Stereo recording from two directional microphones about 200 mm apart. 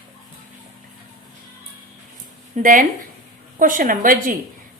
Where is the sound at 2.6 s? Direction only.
40° right (ahead or behind).